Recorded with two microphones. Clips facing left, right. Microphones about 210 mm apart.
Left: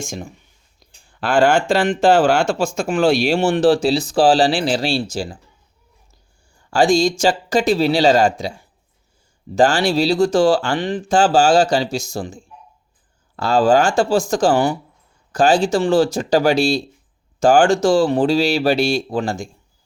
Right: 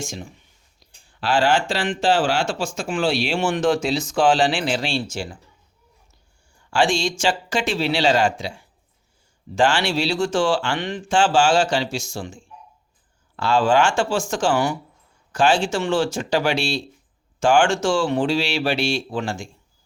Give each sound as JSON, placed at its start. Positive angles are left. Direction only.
{"t": 0.0, "sound": "speech", "side_deg": 50}
{"t": 6.7, "sound": "speech", "side_deg": 40}